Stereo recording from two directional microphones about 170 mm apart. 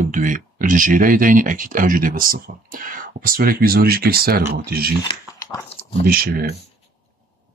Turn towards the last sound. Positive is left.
turn(degrees=-60)  # may be behind; listen again after turning